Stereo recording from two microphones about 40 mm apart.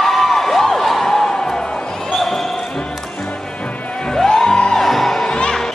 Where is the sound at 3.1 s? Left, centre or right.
Left.